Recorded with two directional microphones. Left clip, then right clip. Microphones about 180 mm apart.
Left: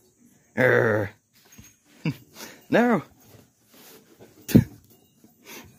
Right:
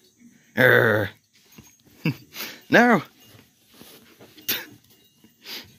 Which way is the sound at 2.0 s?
Centre (ahead or behind).